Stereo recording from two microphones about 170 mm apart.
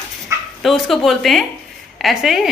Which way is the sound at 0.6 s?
Centre (ahead or behind).